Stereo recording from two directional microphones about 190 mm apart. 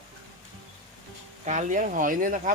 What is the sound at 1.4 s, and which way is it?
Speech, 40° right (ahead or behind).